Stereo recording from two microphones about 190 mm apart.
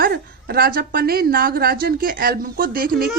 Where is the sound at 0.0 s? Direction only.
55° right (ahead or behind).